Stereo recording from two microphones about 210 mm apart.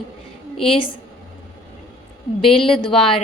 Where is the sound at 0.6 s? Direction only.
25° left (ahead or behind).